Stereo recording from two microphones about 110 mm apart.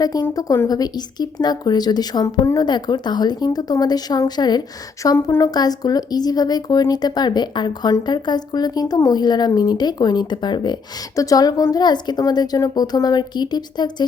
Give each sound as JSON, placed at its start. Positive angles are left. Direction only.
{"t": 0.0, "sound": "speech", "side_deg": 35}
{"t": 2.6, "sound": "speech", "side_deg": 40}
{"t": 11.1, "sound": "speech", "side_deg": 30}